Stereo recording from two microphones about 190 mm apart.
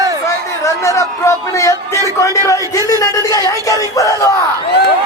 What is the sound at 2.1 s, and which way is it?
A woman's voice, 15° left (ahead or behind).